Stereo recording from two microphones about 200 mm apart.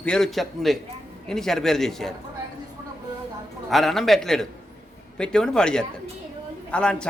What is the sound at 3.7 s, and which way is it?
A man's voice, centre (ahead or behind).